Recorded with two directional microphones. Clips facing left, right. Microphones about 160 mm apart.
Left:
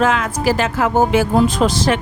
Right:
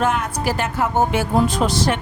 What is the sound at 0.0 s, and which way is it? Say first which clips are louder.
A woman's voice: left 4 dB; 90° left.